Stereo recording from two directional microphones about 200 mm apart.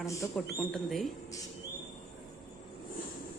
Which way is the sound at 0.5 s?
Centre (ahead or behind).